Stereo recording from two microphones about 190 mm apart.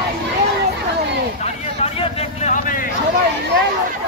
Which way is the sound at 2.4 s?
45° left (ahead or behind).